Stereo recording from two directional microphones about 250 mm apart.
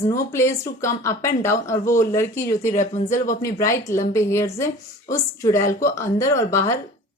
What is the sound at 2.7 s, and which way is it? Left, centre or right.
Speech, left.